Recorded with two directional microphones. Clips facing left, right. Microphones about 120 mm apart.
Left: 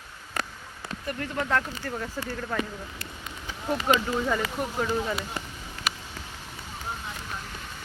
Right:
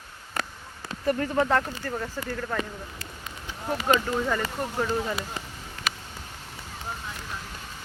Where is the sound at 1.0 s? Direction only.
30° right (ahead or behind).